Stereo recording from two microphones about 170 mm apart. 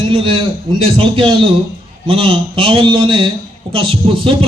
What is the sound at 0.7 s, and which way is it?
A man's voice, 30° right (ahead or behind).